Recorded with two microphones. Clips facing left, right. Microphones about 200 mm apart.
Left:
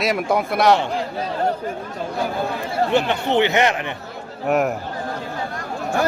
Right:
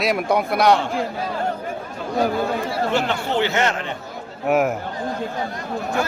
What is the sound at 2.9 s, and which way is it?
Speech, 20° left (ahead or behind).